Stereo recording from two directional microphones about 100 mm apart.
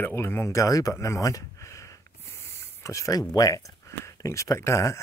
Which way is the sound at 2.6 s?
30° left (ahead or behind).